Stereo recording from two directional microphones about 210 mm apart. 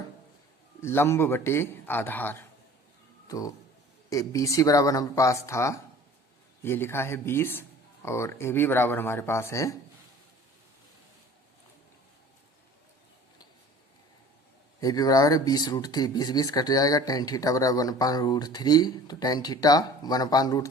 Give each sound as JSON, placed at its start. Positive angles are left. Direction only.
{"t": 0.8, "sound": "speech", "side_deg": 10}
{"t": 14.8, "sound": "speech", "side_deg": 15}